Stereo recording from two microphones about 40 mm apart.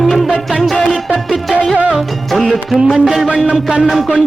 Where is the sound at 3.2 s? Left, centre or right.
Centre.